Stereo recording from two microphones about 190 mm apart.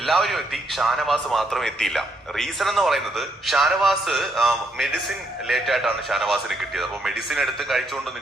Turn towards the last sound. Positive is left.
turn(degrees=0)  # may be behind; listen again after turning